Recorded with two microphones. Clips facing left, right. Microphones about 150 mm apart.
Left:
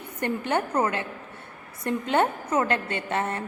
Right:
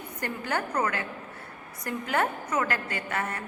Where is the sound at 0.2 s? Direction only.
25° left (ahead or behind).